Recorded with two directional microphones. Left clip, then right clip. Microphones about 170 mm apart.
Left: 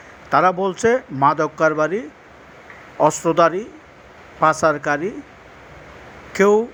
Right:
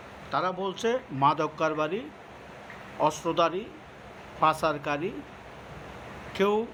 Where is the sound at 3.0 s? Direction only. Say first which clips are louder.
Left 10 dB; 35° left (ahead or behind).